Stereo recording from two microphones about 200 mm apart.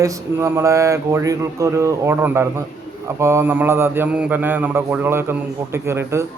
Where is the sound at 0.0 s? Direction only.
15° right (ahead or behind).